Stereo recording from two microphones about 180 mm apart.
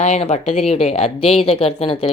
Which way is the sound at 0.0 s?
40° left (ahead or behind).